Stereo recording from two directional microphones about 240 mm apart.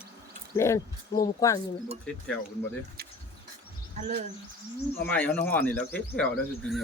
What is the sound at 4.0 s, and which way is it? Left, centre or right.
Speech, right.